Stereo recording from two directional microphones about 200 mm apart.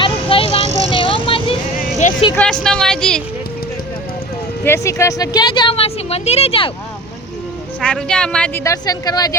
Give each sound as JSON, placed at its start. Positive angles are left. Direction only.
{"t": 0.0, "sound": "music", "side_deg": 25}
{"t": 0.6, "sound": "music", "side_deg": -35}
{"t": 0.9, "sound": "vehicle", "side_deg": 25}
{"t": 2.3, "sound": "a woman's voice", "side_deg": 5}
{"t": 4.6, "sound": "a woman's voice", "side_deg": 15}
{"t": 7.8, "sound": "a woman's voice", "side_deg": 5}
{"t": 8.6, "sound": "a woman's voice", "side_deg": 15}